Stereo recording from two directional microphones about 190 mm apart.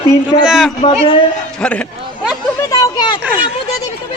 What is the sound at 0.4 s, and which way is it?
Speech, 5° right (ahead or behind).